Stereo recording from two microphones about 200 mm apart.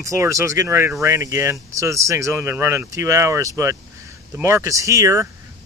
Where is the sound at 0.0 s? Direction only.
15° right (ahead or behind).